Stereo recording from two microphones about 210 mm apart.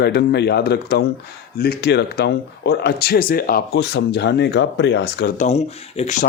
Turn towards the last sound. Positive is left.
turn(degrees=35)  # may be behind; listen again after turning